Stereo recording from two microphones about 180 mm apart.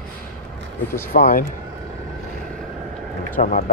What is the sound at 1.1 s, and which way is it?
Speech, 55° left (ahead or behind).